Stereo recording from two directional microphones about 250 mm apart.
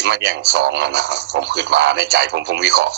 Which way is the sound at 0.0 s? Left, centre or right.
Right.